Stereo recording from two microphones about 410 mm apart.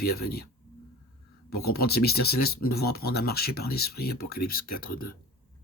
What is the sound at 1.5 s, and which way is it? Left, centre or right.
Speech, left.